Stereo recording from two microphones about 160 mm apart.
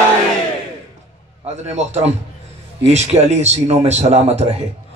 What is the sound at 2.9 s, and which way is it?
Speech, 45° right (ahead or behind).